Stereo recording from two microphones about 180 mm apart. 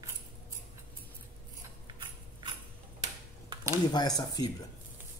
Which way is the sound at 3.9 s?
20° left (ahead or behind).